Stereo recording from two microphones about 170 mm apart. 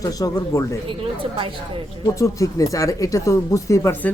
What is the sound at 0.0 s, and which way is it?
Speech, 20° left (ahead or behind).